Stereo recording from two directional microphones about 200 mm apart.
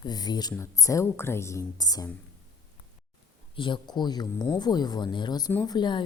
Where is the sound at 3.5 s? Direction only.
25° left (ahead or behind).